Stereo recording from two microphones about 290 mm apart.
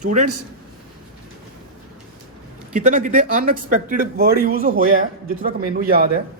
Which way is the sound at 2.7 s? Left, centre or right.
Right.